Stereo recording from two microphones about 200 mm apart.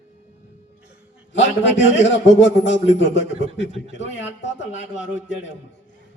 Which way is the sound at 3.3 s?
30° right (ahead or behind).